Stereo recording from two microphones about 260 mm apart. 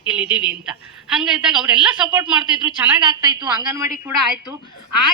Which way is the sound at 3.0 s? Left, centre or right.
Centre.